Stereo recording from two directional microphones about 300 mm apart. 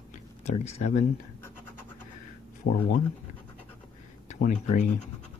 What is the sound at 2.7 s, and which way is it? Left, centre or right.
Speech, left.